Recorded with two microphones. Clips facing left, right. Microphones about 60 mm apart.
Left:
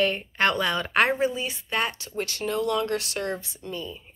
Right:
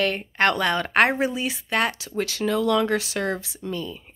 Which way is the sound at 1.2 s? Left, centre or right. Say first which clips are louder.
Right 1 dB; right.